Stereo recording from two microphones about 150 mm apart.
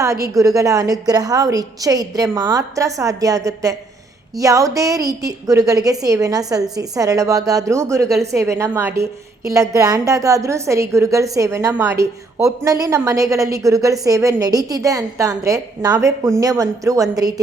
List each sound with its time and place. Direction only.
0.0 s a woman's voice: 20° right (ahead or behind)